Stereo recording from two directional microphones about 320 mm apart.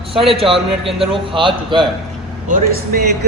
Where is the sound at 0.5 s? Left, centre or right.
Centre.